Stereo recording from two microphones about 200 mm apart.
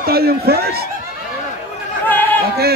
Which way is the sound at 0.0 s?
50° right (ahead or behind).